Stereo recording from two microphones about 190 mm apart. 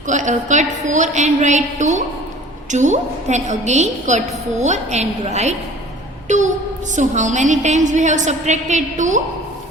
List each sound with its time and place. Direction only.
0.1 s a woman's voice: 40° right (ahead or behind)
6.2 s a sound: 40° right (ahead or behind)
6.9 s a woman's voice: 40° right (ahead or behind)